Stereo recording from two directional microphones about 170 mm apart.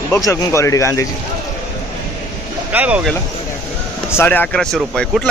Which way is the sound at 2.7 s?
5° right (ahead or behind).